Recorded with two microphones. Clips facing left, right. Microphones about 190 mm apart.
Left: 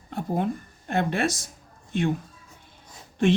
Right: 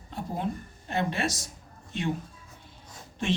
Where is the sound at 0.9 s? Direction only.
55° left (ahead or behind).